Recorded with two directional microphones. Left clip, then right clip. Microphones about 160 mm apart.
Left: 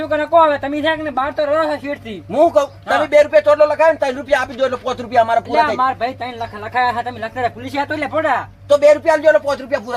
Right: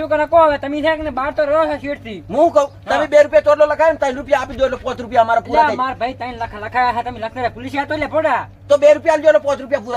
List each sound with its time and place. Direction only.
0.3 s speech: 15° right (ahead or behind)
2.3 s a man's voice: 5° left (ahead or behind); by 8.4 s 15° right (ahead or behind)
8.7 s a man's voice: centre (ahead or behind)